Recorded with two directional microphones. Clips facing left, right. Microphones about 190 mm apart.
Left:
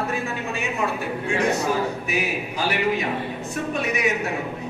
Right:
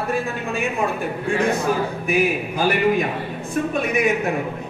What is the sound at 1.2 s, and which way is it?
A man's voice, 55° right (ahead or behind).